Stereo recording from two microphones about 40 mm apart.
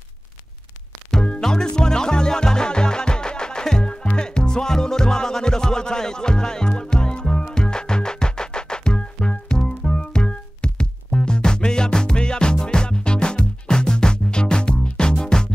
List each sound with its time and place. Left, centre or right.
1.1 s music: centre